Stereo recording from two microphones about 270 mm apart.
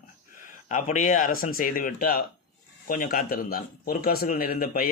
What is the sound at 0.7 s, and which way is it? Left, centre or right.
A man's voice, left.